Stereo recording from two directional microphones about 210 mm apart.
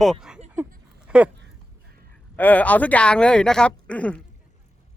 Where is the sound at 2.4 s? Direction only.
10° left (ahead or behind).